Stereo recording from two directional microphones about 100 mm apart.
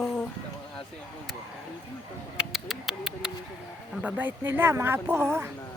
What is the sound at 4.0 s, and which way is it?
Speech, 15° right (ahead or behind).